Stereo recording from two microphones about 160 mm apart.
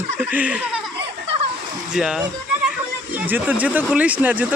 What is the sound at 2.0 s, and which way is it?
Speech, 5° right (ahead or behind).